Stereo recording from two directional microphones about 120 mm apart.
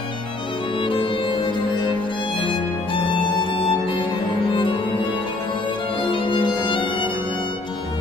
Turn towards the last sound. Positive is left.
turn(degrees=45)  # may be behind; listen again after turning